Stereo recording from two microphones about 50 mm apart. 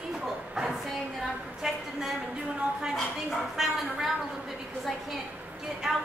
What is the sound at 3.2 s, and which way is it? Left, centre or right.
Speech, centre.